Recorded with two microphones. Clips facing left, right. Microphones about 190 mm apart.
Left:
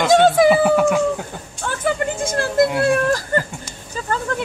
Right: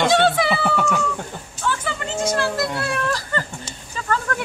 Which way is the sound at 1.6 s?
55° left (ahead or behind).